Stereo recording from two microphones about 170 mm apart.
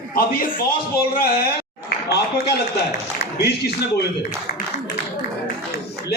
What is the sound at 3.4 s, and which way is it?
Speech, 70° left (ahead or behind).